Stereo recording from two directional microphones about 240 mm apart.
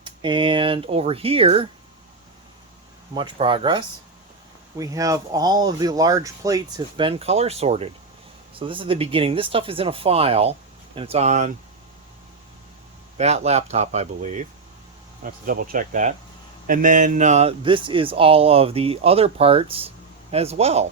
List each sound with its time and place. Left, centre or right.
0.0 s speech: right
3.2 s speech: right
13.1 s speech: right